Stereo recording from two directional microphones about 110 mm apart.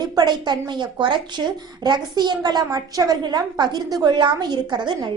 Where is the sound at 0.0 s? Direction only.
40° right (ahead or behind).